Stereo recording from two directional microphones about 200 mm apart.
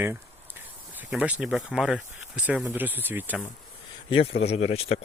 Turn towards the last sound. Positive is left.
turn(degrees=30)  # may be behind; listen again after turning